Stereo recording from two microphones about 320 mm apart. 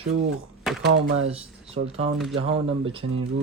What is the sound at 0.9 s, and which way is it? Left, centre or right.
Speech, right.